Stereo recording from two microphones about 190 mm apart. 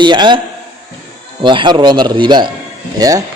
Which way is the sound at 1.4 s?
25° right (ahead or behind).